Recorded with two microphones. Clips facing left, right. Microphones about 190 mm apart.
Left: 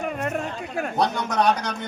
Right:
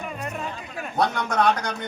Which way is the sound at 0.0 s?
55° left (ahead or behind).